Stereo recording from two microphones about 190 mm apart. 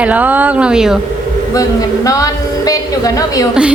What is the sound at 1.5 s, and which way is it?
A woman's voice, 20° left (ahead or behind).